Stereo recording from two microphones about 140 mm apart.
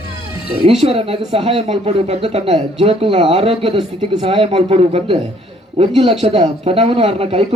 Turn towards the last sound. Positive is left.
turn(degrees=-45)  # may be behind; listen again after turning